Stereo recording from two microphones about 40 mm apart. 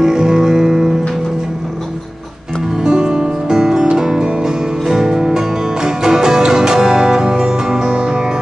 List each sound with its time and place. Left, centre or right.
0.0 s music: centre
2.8 s music: centre